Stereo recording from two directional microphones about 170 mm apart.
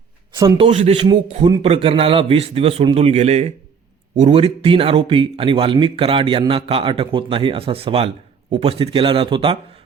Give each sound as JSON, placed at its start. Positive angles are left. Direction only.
{"t": 0.5, "sound": "a man's voice", "side_deg": -35}